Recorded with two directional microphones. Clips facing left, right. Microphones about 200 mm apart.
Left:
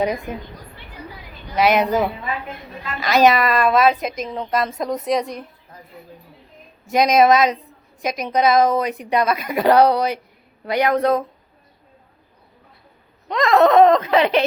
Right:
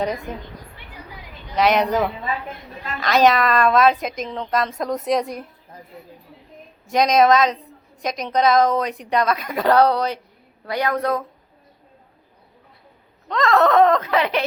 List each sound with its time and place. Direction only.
0.0 s a woman's voice: 10° left (ahead or behind)
1.5 s a woman's voice: 5° left (ahead or behind)
6.8 s a woman's voice: 5° left (ahead or behind); by 11.3 s 20° left (ahead or behind)
13.2 s a woman's voice: 15° left (ahead or behind)